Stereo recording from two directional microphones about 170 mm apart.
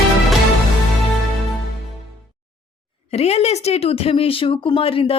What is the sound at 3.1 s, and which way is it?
Speech, 40° left (ahead or behind).